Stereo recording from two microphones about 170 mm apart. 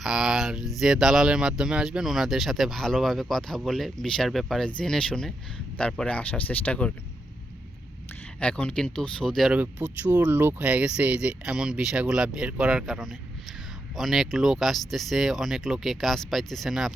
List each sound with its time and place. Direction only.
0.0 s speech: 5° right (ahead or behind)
8.4 s speech: 5° left (ahead or behind)